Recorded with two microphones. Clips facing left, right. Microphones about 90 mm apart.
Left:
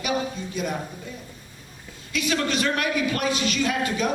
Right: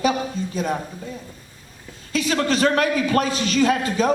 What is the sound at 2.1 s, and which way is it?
A man's voice, 35° right (ahead or behind).